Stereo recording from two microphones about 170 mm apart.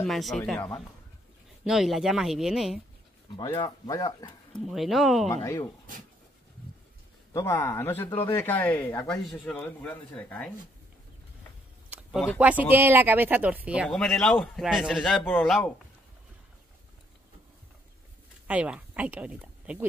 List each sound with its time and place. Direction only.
0.0 s speech: centre (ahead or behind)
3.3 s speech: 20° left (ahead or behind)
4.6 s speech: centre (ahead or behind)
7.3 s speech: 15° left (ahead or behind)
12.4 s speech: 10° right (ahead or behind)
18.5 s speech: 10° right (ahead or behind)